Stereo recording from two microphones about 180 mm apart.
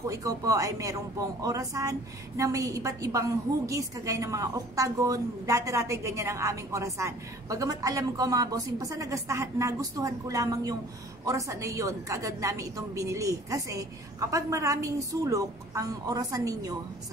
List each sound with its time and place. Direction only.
0.1 s a man's voice: 20° right (ahead or behind)